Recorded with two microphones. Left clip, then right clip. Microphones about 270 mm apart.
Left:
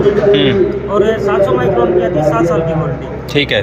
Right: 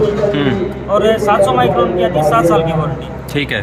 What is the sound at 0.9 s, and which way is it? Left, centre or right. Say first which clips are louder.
Speech: right 1 dB; right.